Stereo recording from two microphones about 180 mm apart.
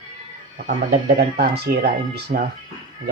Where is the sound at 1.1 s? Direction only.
65° right (ahead or behind).